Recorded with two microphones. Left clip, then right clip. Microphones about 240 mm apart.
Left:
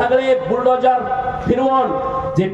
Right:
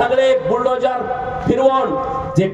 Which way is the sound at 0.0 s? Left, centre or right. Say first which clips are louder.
Right 1 dB; right.